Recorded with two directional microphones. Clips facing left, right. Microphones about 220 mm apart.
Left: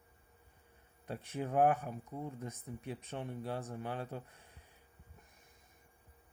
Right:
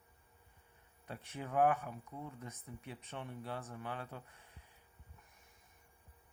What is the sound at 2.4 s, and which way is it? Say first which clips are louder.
Speech: left 5 dB; 40° left (ahead or behind).